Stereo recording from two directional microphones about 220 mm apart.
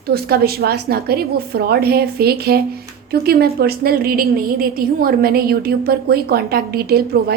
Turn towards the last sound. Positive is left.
turn(degrees=-45)  # may be behind; listen again after turning